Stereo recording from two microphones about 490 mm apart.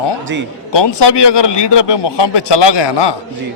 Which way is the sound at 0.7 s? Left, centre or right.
Left.